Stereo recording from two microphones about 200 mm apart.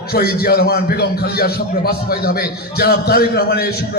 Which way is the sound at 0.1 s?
50° left (ahead or behind).